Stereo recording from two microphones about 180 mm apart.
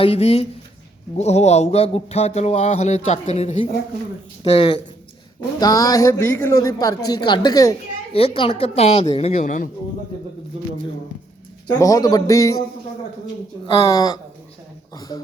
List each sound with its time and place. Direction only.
0.0 s speech: 35° left (ahead or behind)
4.5 s a woman's voice: 30° left (ahead or behind)
8.1 s speech: 30° left (ahead or behind); by 9.6 s 45° left (ahead or behind)
11.8 s a woman's voice: 20° left (ahead or behind)
13.7 s a woman's voice: 20° left (ahead or behind)